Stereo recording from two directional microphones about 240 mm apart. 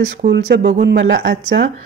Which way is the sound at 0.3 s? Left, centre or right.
Right.